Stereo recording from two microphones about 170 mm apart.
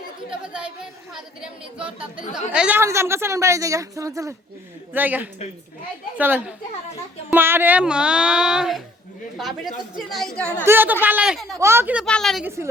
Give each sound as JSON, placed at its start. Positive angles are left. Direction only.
{"t": 0.3, "sound": "a woman's voice", "side_deg": -5}
{"t": 10.7, "sound": "a woman's voice", "side_deg": -10}
{"t": 11.5, "sound": "a woman's voice", "side_deg": -15}
{"t": 12.0, "sound": "a woman's voice", "side_deg": 5}